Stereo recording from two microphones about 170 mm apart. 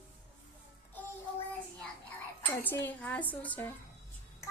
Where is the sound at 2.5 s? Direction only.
10° left (ahead or behind).